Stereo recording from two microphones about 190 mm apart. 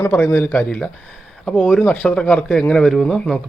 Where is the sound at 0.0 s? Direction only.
10° left (ahead or behind).